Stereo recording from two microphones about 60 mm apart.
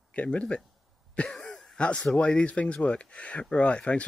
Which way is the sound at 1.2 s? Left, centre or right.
Centre.